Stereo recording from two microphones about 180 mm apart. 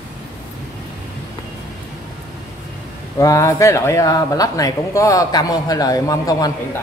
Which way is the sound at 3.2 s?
20° left (ahead or behind).